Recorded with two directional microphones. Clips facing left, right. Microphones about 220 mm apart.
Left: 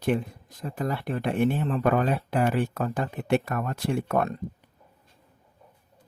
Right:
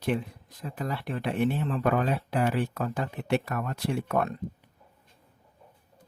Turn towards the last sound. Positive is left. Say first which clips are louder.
# left 2 dB
turn(degrees=45)  # may be behind; listen again after turning